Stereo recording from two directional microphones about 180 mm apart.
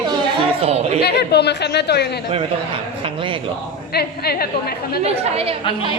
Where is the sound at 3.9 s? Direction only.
60° left (ahead or behind).